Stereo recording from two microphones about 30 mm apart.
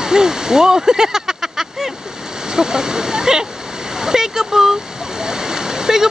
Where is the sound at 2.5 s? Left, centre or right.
Right.